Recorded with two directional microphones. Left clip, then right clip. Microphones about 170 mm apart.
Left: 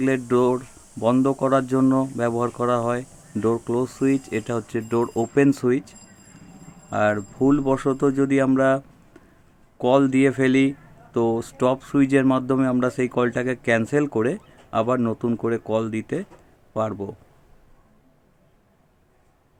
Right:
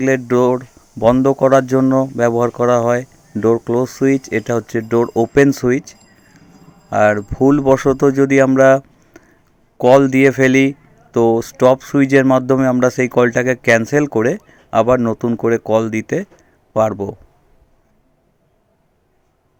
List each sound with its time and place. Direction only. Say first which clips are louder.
0.0 s speech: right 6 dB; 30° right (ahead or behind)